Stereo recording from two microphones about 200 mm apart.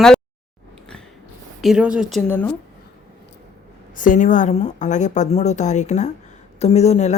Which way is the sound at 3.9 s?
40° left (ahead or behind).